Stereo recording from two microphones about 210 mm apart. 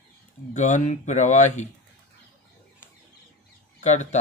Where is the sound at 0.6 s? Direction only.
35° left (ahead or behind).